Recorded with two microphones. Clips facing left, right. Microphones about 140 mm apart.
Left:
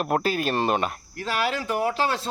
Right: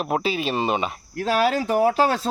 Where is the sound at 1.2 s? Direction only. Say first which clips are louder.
Right 6 dB; 45° right (ahead or behind).